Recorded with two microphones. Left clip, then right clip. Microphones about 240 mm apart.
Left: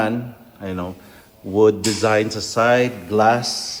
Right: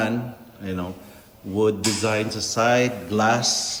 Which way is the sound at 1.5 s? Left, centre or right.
Left.